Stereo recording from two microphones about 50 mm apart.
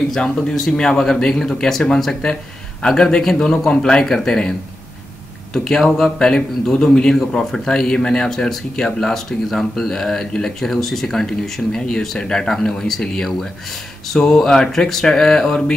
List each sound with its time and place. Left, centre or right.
0.1 s speech: centre